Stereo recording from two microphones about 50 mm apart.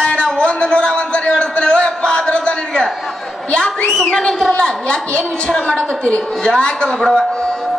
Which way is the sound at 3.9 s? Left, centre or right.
Centre.